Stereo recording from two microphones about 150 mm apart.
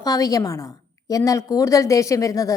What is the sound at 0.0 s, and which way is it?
A woman's voice, 25° left (ahead or behind).